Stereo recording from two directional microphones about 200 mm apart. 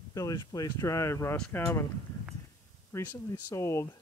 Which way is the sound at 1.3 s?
5° left (ahead or behind).